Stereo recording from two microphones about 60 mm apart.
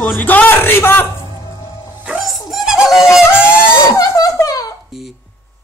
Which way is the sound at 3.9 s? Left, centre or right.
Left.